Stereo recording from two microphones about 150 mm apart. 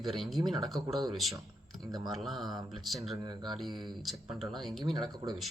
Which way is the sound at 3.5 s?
Centre (ahead or behind).